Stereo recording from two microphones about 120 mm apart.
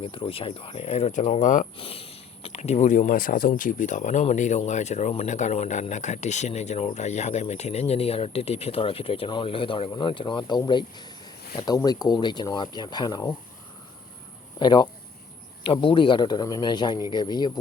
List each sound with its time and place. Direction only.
0.0 s speech: 50° left (ahead or behind); by 1.6 s 90° left
1.7 s speech: 50° left (ahead or behind); by 13.3 s 35° left (ahead or behind)
14.6 s speech: 40° left (ahead or behind)